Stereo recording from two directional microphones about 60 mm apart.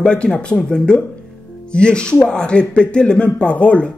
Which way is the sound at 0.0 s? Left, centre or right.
Centre.